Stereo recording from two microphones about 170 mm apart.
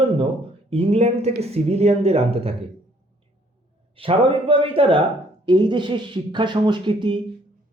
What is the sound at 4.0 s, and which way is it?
Speech, 30° right (ahead or behind).